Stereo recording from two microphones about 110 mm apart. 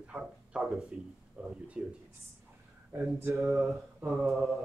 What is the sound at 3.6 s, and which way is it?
Speech, centre (ahead or behind).